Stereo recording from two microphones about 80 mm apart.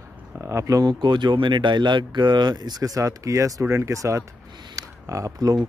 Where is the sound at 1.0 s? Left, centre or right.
Right.